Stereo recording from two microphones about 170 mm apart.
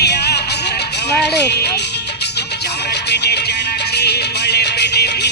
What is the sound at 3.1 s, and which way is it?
Music, 75° left (ahead or behind).